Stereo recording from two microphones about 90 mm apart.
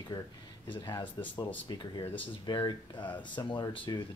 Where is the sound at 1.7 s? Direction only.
50° left (ahead or behind).